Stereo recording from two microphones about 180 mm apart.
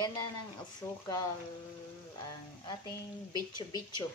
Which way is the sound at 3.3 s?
25° left (ahead or behind).